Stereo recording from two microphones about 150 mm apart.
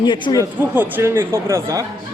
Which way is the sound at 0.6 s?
10° right (ahead or behind).